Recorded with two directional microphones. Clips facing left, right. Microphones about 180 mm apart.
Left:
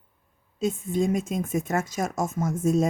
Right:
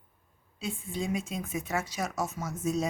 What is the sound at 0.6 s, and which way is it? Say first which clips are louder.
Speech: left 10 dB; 45° left (ahead or behind).